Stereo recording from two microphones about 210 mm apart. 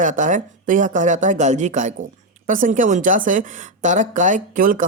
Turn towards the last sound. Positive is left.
turn(degrees=-40)  # may be behind; listen again after turning